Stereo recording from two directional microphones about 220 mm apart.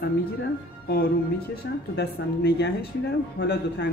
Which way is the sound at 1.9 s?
50° left (ahead or behind).